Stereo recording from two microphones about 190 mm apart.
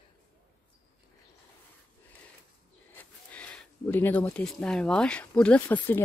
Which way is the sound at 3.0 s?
5° left (ahead or behind).